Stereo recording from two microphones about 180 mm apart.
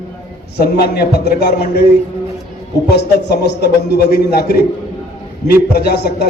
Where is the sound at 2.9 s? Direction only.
70° left (ahead or behind).